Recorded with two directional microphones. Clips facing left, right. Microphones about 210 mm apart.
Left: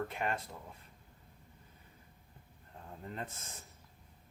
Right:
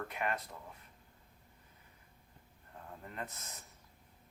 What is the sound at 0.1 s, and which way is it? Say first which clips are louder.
Speech: left 1 dB; 30° left (ahead or behind).